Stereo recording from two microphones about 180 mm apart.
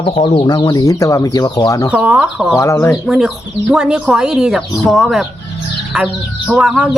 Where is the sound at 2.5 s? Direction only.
15° left (ahead or behind).